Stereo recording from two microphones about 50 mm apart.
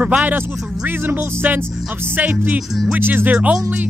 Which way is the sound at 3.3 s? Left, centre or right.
Right.